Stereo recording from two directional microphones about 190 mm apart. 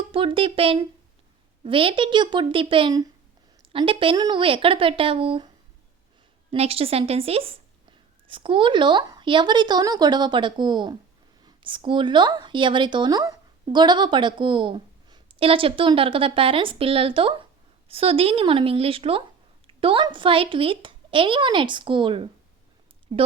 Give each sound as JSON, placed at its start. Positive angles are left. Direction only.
{"t": 0.1, "sound": "a woman's voice", "side_deg": -30}
{"t": 6.5, "sound": "a woman's voice", "side_deg": -30}